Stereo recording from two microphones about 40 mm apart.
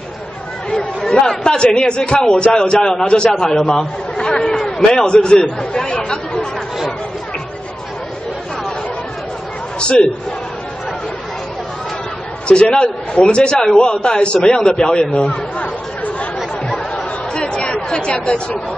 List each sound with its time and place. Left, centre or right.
0.7 s a man's voice: centre
9.8 s a sound: left
12.4 s a man's voice: left
16.6 s chatter: left